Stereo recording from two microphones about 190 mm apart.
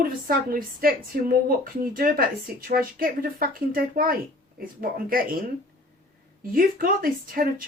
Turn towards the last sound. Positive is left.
turn(degrees=-50)  # may be behind; listen again after turning